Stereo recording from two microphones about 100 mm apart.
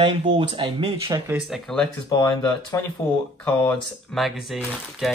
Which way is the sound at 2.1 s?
35° left (ahead or behind).